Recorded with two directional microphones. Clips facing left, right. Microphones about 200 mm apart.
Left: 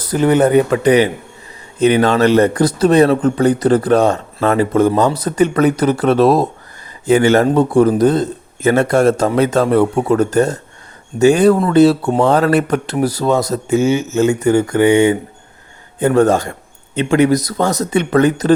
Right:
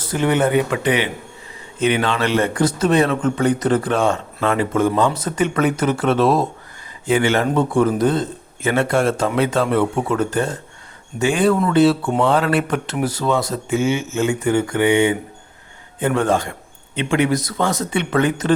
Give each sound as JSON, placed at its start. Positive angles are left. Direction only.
{"t": 0.0, "sound": "a man's voice", "side_deg": 40}